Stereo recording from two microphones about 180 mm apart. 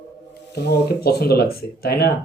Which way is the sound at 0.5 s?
65° left (ahead or behind).